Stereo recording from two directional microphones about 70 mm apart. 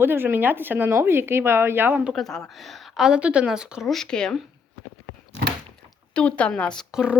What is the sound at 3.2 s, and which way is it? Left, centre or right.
Speech, centre.